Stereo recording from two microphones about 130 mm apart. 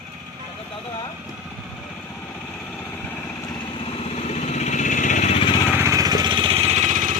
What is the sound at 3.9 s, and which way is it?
Vehicle, 50° left (ahead or behind).